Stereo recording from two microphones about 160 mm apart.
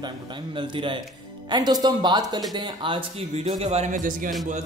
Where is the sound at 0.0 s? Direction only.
30° right (ahead or behind); by 4.3 s 55° right (ahead or behind).